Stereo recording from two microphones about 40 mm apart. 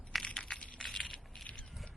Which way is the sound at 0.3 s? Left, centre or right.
Left.